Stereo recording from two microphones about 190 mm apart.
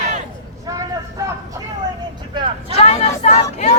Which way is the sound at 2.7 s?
35° left (ahead or behind).